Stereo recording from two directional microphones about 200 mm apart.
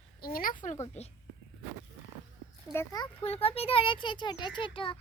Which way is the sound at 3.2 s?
30° left (ahead or behind).